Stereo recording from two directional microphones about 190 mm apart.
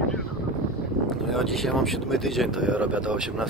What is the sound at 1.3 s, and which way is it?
Speech, centre (ahead or behind).